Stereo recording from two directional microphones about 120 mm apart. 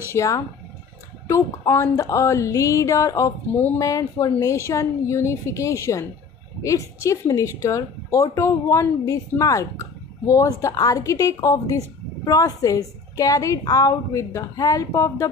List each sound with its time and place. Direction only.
0.1 s speech: 25° left (ahead or behind)